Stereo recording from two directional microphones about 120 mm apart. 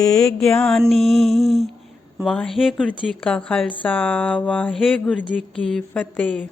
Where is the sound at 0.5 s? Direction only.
5° left (ahead or behind).